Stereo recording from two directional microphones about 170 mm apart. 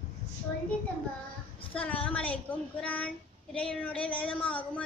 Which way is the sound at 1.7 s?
10° left (ahead or behind).